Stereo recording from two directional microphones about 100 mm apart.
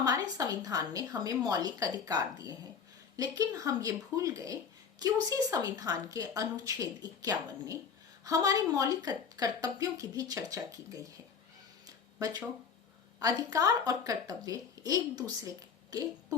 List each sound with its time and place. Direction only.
0.0 s speech: 40° right (ahead or behind)
11.9 s a sound: 40° right (ahead or behind)
13.1 s speech: 35° right (ahead or behind)